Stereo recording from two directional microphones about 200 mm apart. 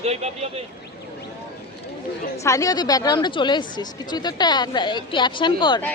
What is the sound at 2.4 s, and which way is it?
Speech, 15° left (ahead or behind).